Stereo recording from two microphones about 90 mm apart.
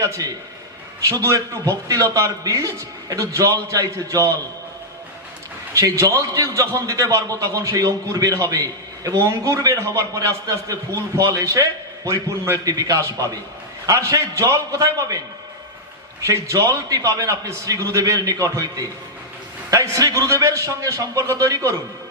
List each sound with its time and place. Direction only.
0.0 s a man's voice: 35° right (ahead or behind)
5.7 s a man's voice: 35° right (ahead or behind)
16.2 s a man's voice: 35° right (ahead or behind)